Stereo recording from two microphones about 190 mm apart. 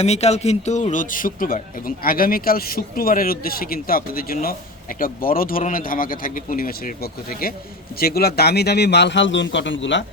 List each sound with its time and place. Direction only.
0.0 s a man's voice: 35° left (ahead or behind); by 10.0 s 75° left (ahead or behind)